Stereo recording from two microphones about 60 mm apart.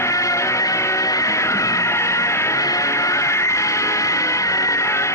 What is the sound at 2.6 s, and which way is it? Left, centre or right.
Music, left.